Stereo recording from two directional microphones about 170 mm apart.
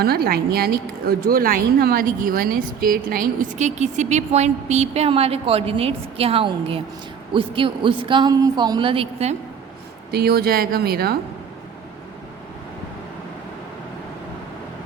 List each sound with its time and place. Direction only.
0.0 s a woman's voice: 65° right (ahead or behind); by 9.3 s 35° right (ahead or behind)
10.1 s speech: 65° right (ahead or behind)